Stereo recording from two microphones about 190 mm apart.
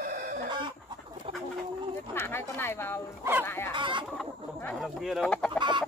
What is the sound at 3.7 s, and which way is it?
Chicken, 25° right (ahead or behind).